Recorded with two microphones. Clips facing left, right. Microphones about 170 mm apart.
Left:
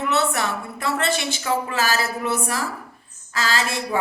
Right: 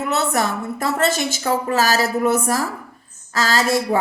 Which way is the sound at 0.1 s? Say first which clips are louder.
Right 3 dB; 40° right (ahead or behind).